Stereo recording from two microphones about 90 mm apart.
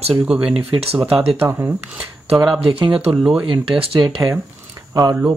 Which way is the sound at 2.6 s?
75° right (ahead or behind).